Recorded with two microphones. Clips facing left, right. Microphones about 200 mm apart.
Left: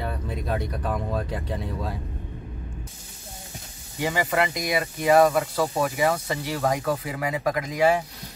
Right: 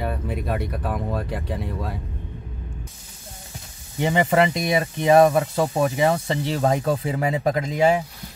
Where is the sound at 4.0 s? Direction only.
25° right (ahead or behind).